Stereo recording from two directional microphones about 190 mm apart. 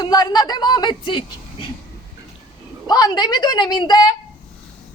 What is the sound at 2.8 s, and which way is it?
Speech, 20° left (ahead or behind).